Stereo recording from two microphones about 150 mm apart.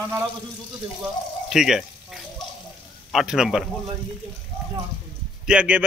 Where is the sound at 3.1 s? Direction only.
Centre (ahead or behind).